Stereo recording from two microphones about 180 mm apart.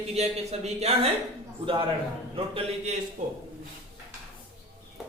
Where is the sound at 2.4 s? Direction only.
30° right (ahead or behind).